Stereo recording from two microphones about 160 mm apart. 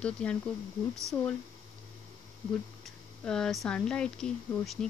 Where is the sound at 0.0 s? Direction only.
5° left (ahead or behind).